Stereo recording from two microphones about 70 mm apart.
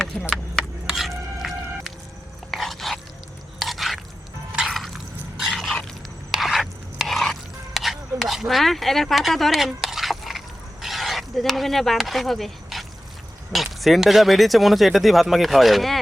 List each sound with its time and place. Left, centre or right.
0.9 s music: centre
2.5 s biting: centre
3.6 s chewing: centre
5.5 s a sound: centre
6.3 s stir: centre
13.5 s speech: centre